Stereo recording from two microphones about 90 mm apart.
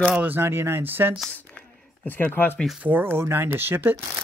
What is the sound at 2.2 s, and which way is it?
Speech, 20° left (ahead or behind).